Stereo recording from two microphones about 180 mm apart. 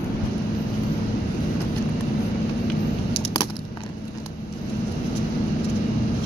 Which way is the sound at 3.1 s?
25° left (ahead or behind).